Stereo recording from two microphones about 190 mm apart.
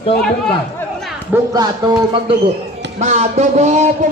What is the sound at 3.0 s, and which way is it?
Speech, 35° right (ahead or behind).